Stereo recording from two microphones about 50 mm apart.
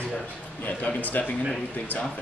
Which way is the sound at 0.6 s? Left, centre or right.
Left.